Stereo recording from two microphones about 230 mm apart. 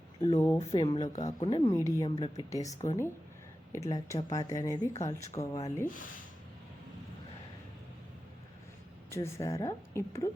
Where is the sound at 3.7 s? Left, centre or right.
Centre.